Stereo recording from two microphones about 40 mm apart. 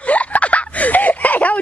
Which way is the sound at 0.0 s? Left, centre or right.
Left.